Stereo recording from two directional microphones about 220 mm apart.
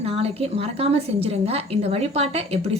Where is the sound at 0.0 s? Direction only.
25° right (ahead or behind).